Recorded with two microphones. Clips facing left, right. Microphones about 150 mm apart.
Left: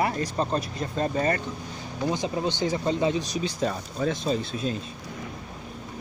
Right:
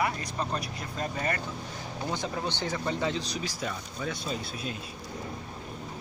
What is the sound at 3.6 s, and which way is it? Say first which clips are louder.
Speech: left 10 dB; 35° left (ahead or behind).